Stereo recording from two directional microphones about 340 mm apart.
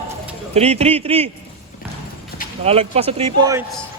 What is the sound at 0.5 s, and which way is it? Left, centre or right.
Speech, centre.